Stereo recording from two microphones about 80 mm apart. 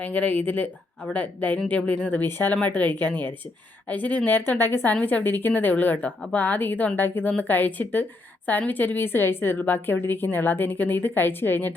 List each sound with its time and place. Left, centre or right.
0.0 s a woman's voice: left